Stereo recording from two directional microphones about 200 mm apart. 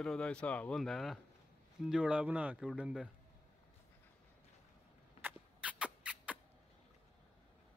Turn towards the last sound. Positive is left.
turn(degrees=-5)  # may be behind; listen again after turning